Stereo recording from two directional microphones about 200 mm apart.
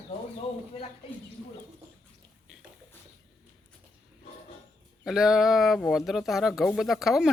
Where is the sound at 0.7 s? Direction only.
30° left (ahead or behind).